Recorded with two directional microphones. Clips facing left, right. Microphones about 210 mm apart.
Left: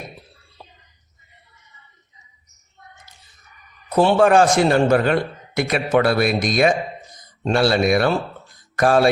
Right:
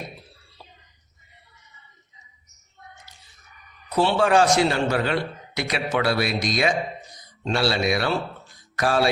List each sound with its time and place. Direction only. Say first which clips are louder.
3.9 s a man's voice: left 5 dB; 50° left (ahead or behind)